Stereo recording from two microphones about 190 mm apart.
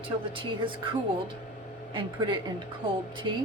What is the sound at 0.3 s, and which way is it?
A woman's voice, 25° right (ahead or behind).